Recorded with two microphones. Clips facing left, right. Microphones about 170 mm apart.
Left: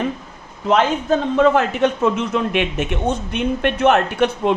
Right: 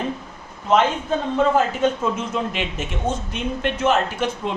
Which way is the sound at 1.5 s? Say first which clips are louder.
Left 2 dB; 70° left (ahead or behind).